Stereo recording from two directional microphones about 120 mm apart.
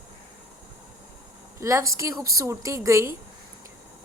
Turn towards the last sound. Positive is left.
turn(degrees=-25)  # may be behind; listen again after turning